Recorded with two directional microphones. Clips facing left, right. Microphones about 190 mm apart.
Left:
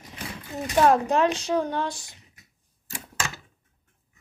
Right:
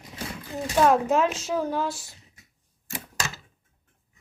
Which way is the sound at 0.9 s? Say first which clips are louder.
Left 1 dB; 5° right (ahead or behind).